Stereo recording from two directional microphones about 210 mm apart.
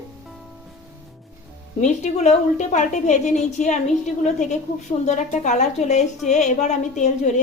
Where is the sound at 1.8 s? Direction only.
30° left (ahead or behind).